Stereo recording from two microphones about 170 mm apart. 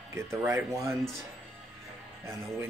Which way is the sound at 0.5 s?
15° right (ahead or behind).